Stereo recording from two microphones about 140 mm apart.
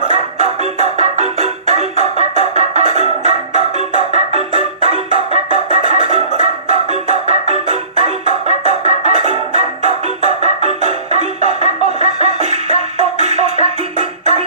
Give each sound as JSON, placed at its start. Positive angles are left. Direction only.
{"t": 0.1, "sound": "music", "side_deg": -55}